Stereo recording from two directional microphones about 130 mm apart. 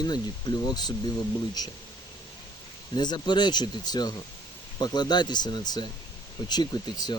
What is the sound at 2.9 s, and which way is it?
Speech, 35° left (ahead or behind).